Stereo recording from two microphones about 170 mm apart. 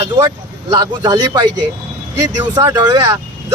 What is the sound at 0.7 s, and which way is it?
Speech, 25° right (ahead or behind).